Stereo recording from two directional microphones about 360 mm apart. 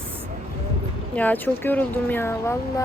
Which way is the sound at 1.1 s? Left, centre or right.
Centre.